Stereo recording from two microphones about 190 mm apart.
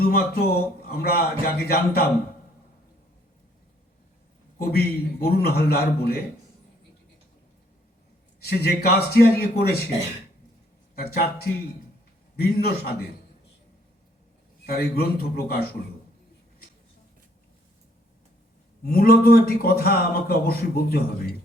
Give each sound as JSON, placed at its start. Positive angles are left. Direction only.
{"t": 0.0, "sound": "a man's voice", "side_deg": 55}
{"t": 4.6, "sound": "a man's voice", "side_deg": 55}
{"t": 8.4, "sound": "a man's voice", "side_deg": 55}
{"t": 10.9, "sound": "a man's voice", "side_deg": 55}
{"t": 12.4, "sound": "a man's voice", "side_deg": 55}
{"t": 14.7, "sound": "a man's voice", "side_deg": 55}
{"t": 18.9, "sound": "a man's voice", "side_deg": 50}